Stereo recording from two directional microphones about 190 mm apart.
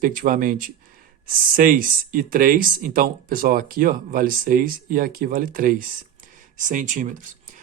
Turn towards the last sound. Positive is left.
turn(degrees=-40)  # may be behind; listen again after turning